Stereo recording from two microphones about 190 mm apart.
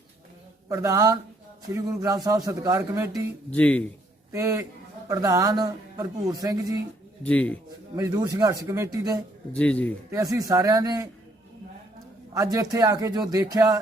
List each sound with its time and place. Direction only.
0.7 s a man's voice: 15° right (ahead or behind)
3.5 s speech: 10° left (ahead or behind)
4.3 s a man's voice: 15° right (ahead or behind)
7.3 s speech: 5° left (ahead or behind)
7.9 s a man's voice: 20° right (ahead or behind)
9.5 s speech: 5° left (ahead or behind)
10.1 s a man's voice: 20° right (ahead or behind)
12.3 s a man's voice: 20° right (ahead or behind)